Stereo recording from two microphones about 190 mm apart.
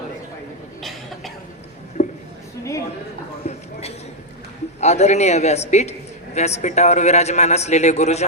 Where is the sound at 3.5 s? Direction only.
35° left (ahead or behind).